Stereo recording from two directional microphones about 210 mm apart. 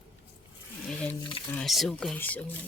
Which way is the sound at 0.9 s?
5° left (ahead or behind).